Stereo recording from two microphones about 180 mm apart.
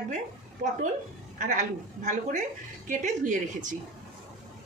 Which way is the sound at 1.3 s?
45° right (ahead or behind).